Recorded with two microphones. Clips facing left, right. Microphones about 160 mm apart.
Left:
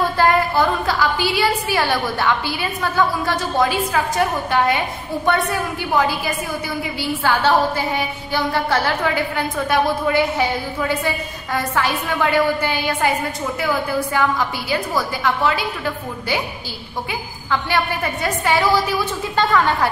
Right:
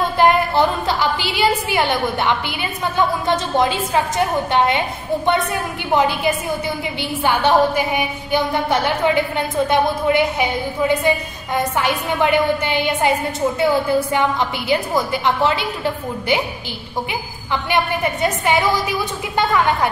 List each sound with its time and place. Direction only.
0.2 s a woman's voice: 25° right (ahead or behind)
17.1 s a woman's voice: 20° right (ahead or behind)